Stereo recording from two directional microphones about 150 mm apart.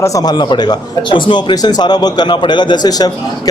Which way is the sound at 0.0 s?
25° left (ahead or behind).